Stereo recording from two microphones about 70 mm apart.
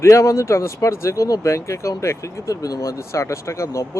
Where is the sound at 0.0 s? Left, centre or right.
Left.